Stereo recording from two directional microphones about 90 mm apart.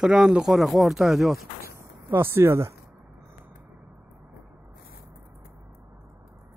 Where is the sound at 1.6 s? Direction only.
30° right (ahead or behind).